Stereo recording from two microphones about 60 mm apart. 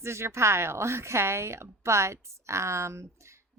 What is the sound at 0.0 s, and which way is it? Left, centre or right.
Speech, right.